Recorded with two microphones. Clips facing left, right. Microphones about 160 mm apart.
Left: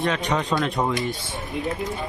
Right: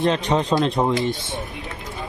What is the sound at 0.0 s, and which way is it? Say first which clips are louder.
Speech: right 4 dB; 25° right (ahead or behind).